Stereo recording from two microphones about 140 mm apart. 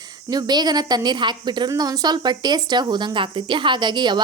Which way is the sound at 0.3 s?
30° right (ahead or behind).